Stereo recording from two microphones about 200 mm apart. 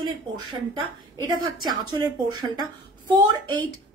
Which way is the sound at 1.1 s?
20° right (ahead or behind).